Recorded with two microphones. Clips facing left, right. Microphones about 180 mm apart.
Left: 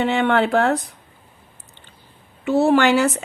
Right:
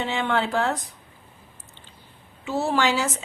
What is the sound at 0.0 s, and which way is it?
Speech, 60° left (ahead or behind).